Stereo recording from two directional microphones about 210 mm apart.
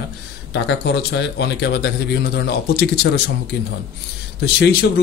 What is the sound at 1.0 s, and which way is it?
Speech, 55° left (ahead or behind).